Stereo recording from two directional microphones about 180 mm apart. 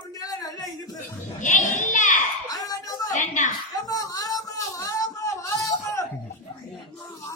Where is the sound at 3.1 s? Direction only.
45° left (ahead or behind).